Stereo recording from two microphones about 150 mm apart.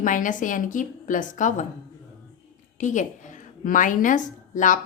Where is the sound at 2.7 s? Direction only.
55° left (ahead or behind).